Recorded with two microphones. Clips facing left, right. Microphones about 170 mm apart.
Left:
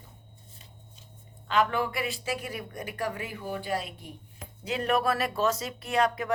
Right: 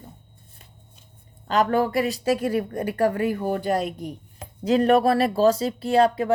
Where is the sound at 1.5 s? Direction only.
40° right (ahead or behind).